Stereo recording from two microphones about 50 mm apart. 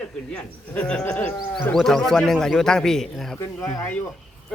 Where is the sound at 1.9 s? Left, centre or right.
Centre.